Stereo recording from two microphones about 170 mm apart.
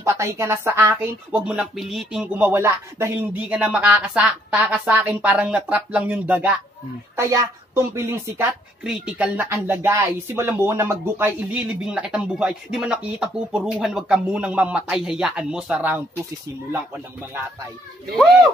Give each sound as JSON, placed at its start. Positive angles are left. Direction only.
{"t": 0.0, "sound": "speech", "side_deg": -15}
{"t": 8.8, "sound": "speech", "side_deg": -5}